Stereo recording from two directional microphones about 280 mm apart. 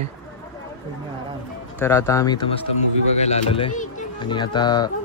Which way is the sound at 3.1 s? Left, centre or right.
Left.